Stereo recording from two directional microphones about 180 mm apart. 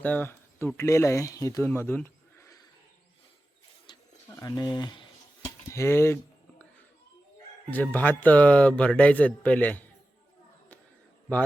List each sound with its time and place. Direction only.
0.0 s speech: 10° left (ahead or behind)
4.3 s speech: 15° left (ahead or behind)
7.7 s speech: 10° left (ahead or behind)